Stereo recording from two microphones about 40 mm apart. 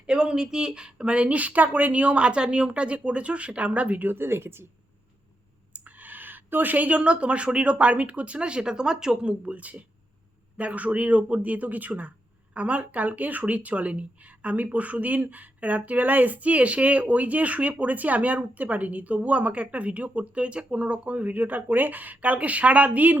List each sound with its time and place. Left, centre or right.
0.1 s speech: right
4.0 s speech: right
5.7 s speech: right; by 9.1 s centre
9.2 s speech: right